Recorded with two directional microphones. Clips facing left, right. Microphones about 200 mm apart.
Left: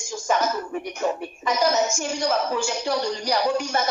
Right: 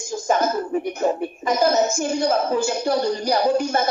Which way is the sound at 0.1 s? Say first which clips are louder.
Right 3 dB; 35° right (ahead or behind).